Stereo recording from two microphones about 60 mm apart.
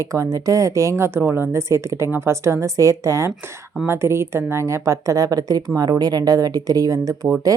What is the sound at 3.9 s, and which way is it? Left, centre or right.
A woman's voice, right.